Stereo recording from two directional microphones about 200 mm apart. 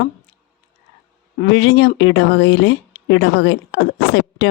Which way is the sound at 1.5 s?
70° left (ahead or behind).